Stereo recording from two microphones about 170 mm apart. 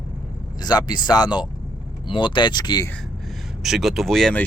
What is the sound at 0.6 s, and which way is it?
Speech, 25° left (ahead or behind).